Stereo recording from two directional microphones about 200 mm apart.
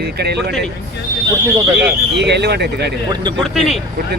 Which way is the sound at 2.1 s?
60° right (ahead or behind).